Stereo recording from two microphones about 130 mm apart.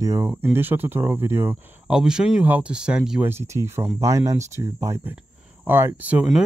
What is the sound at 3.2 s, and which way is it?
Speech, 20° right (ahead or behind).